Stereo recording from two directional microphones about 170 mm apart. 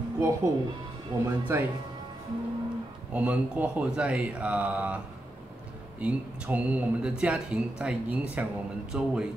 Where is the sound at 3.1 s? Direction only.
10° right (ahead or behind).